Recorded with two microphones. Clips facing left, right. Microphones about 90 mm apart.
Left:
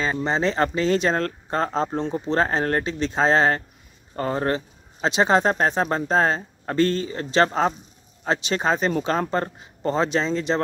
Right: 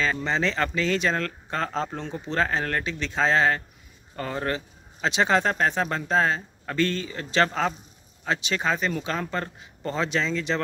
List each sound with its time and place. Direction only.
0.0 s speech: 20° left (ahead or behind)